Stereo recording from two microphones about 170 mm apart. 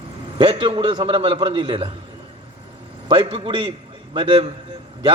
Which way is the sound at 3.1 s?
30° right (ahead or behind).